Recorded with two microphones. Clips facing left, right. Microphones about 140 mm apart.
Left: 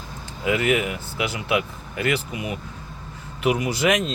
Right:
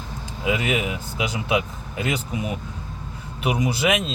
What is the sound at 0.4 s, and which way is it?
Speech, 20° right (ahead or behind).